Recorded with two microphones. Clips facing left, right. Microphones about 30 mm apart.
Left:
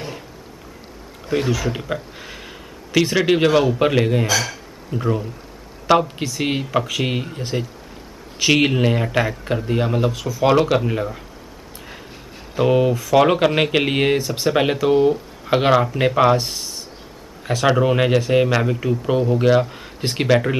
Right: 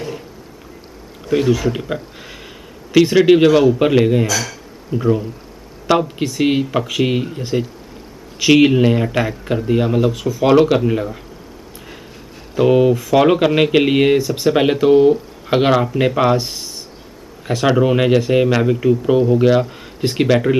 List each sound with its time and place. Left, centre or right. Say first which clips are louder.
1.5 s a man's voice: right 5 dB; centre
4.3 s speech: even; centre
4.9 s a man's voice: right 5 dB; centre
12.5 s a man's voice: right 4 dB; centre